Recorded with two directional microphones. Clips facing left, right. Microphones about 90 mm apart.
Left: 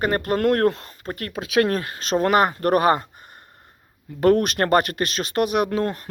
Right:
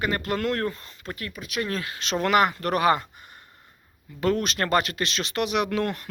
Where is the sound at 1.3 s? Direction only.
90° left.